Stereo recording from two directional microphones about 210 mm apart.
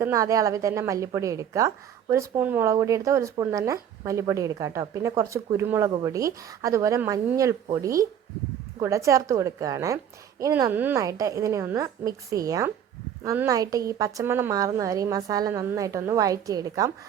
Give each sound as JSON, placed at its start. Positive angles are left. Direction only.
{"t": 0.0, "sound": "a woman's voice", "side_deg": -15}